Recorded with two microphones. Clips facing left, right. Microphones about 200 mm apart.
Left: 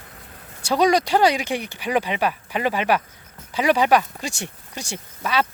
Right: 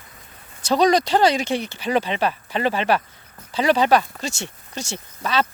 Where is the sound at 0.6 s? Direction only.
10° left (ahead or behind).